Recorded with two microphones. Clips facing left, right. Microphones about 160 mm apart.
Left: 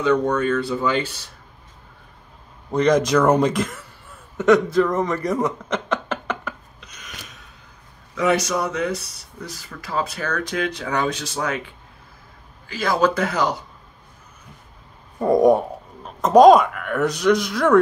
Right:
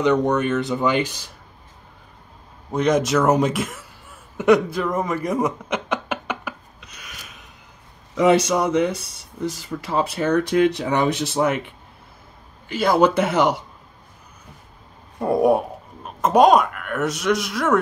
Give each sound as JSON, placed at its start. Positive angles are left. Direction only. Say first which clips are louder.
{"t": 0.0, "sound": "speech", "louder": "right 1 dB", "side_deg": -20}
{"t": 2.7, "sound": "speech", "louder": "left 2 dB", "side_deg": -5}
{"t": 4.4, "sound": "a sound", "louder": "left 1 dB", "side_deg": -10}
{"t": 8.1, "sound": "speech", "louder": "right 4 dB", "side_deg": -25}
{"t": 13.1, "sound": "speech", "louder": "right 3 dB", "side_deg": -25}
{"t": 15.1, "sound": "speech", "louder": "left 2 dB", "side_deg": -5}